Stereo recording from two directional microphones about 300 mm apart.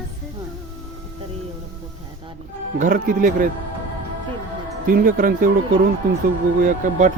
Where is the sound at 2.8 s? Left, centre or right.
Right.